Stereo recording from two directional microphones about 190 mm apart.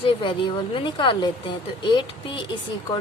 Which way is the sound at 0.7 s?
25° left (ahead or behind).